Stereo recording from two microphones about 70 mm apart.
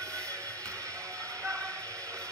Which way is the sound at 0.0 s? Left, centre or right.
Right.